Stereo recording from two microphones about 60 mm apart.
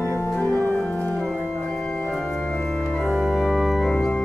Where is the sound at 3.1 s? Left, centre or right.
Centre.